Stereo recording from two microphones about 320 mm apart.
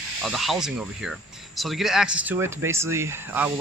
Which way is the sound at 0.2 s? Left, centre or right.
Centre.